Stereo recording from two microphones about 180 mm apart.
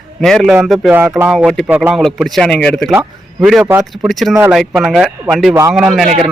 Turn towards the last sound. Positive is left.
turn(degrees=0)  # may be behind; listen again after turning